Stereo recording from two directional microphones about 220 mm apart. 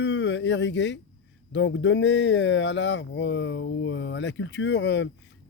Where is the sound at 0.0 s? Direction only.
55° left (ahead or behind).